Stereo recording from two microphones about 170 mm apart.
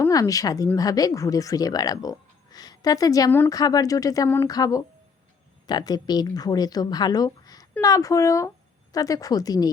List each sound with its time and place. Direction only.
0.0 s speech: 20° left (ahead or behind)